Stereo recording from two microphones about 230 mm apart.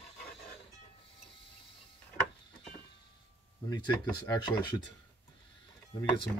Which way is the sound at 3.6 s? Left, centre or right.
Centre.